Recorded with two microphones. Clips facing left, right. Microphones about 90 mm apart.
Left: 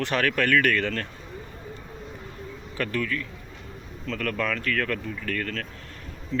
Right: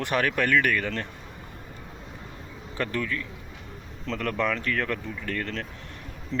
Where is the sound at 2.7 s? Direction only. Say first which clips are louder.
Left 1 dB; 20° right (ahead or behind).